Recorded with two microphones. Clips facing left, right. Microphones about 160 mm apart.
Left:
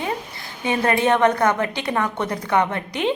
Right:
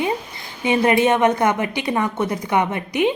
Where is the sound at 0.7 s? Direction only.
15° right (ahead or behind).